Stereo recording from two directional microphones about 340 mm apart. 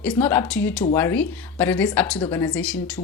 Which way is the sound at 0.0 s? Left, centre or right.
Centre.